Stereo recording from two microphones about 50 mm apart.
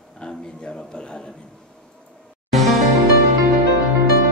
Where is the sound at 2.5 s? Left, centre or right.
Centre.